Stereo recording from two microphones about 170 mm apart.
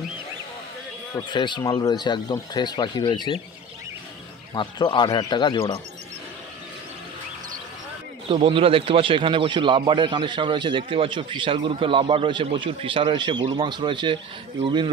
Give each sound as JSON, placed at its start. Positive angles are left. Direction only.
{"t": 1.1, "sound": "speech", "side_deg": 25}
{"t": 4.6, "sound": "speech", "side_deg": 25}
{"t": 8.3, "sound": "a man's voice", "side_deg": -30}